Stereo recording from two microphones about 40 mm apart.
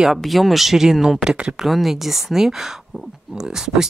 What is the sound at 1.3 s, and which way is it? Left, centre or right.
Speech, right.